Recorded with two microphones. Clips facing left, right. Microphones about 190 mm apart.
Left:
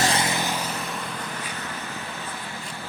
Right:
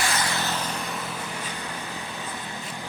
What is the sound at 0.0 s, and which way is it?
Vehicle, 30° left (ahead or behind).